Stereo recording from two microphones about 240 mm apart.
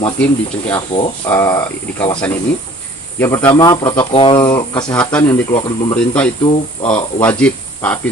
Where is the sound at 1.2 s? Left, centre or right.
Centre.